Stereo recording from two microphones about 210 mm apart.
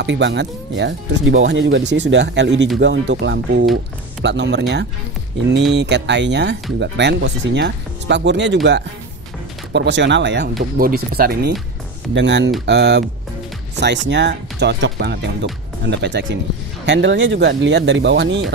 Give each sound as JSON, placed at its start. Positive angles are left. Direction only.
{"t": 0.0, "sound": "speech", "side_deg": -60}
{"t": 9.7, "sound": "speech", "side_deg": -55}
{"t": 10.8, "sound": "speech", "side_deg": -45}
{"t": 12.1, "sound": "speech", "side_deg": -55}